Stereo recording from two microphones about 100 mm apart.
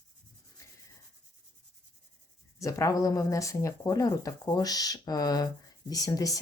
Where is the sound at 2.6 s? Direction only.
35° left (ahead or behind).